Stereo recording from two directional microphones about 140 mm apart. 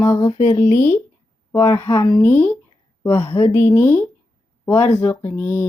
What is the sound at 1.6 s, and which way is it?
Speech, 30° left (ahead or behind).